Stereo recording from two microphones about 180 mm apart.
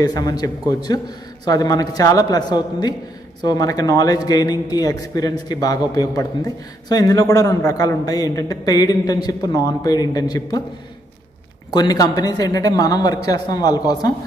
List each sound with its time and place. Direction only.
0.0 s a man's voice: 20° left (ahead or behind)
11.7 s a man's voice: 20° left (ahead or behind)